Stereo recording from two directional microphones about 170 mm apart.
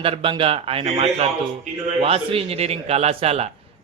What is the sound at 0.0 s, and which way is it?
A man's voice, 30° right (ahead or behind).